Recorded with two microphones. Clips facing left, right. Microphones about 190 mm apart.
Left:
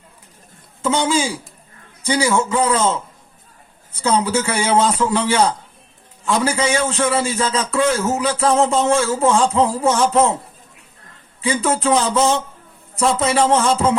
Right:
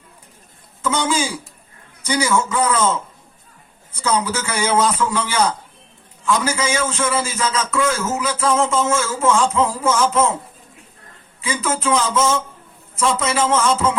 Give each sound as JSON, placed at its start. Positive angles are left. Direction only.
{"t": 0.8, "sound": "a man's voice", "side_deg": 25}
{"t": 4.0, "sound": "a man's voice", "side_deg": 25}
{"t": 11.4, "sound": "a man's voice", "side_deg": 35}